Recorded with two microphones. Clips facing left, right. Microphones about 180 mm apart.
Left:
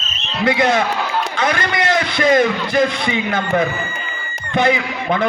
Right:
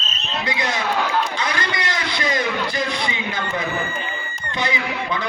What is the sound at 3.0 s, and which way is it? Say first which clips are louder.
A man's voice: left 6 dB; 55° left (ahead or behind).